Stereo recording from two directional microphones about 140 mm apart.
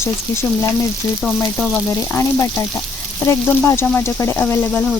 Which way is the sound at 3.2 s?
15° left (ahead or behind).